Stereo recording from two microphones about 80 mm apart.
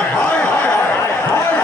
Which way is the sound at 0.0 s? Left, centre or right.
Centre.